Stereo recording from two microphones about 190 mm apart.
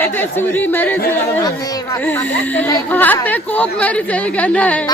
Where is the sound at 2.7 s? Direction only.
10° left (ahead or behind).